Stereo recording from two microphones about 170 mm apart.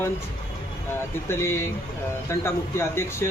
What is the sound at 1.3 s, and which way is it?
Speech, 15° left (ahead or behind).